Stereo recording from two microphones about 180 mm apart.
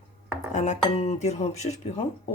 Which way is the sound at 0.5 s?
40° left (ahead or behind).